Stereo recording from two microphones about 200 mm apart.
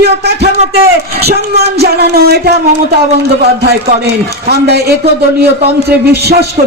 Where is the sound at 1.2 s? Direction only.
50° right (ahead or behind).